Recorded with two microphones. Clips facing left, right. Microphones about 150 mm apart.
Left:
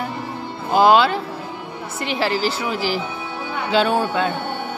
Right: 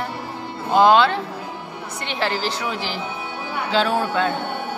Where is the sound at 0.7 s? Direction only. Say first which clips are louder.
Even; 5° left (ahead or behind).